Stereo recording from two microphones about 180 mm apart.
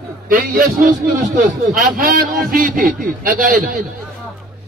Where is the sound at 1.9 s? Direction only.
50° right (ahead or behind).